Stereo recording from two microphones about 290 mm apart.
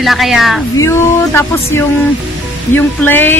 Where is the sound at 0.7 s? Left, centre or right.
Centre.